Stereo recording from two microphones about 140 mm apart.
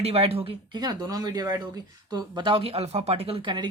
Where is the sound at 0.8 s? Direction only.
30° right (ahead or behind).